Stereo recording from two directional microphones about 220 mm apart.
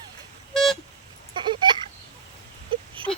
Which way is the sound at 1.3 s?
20° right (ahead or behind).